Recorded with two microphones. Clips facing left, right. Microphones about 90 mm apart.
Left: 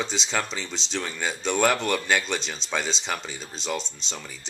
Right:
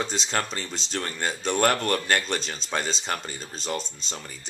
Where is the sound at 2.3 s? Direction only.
45° right (ahead or behind).